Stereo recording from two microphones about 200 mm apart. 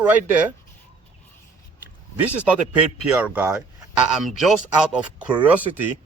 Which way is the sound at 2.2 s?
5° right (ahead or behind).